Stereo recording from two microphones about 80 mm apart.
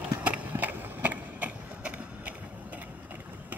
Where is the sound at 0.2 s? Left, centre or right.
Centre.